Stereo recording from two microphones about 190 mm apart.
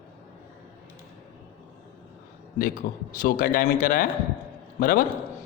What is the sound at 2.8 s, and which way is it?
A man's voice, 50° left (ahead or behind).